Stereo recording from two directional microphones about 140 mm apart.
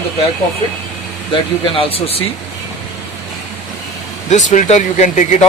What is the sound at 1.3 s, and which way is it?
Speech, 40° left (ahead or behind).